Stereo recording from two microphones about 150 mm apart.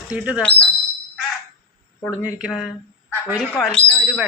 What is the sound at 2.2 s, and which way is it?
Speech, 10° right (ahead or behind).